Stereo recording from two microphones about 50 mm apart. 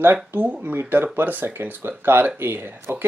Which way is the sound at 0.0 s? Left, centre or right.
Right.